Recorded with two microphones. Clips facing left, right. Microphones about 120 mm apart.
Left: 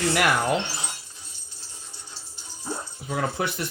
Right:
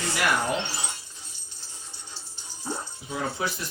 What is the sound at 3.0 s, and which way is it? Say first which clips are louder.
Speech: left 3 dB; 60° left (ahead or behind).